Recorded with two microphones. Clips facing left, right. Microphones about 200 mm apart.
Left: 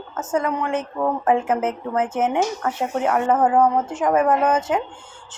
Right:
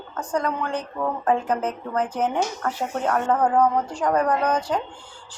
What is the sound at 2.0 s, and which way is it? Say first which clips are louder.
A woman's voice: left 3 dB; 25° left (ahead or behind).